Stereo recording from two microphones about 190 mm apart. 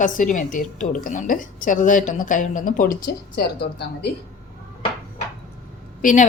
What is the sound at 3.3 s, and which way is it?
Speech, 60° left (ahead or behind).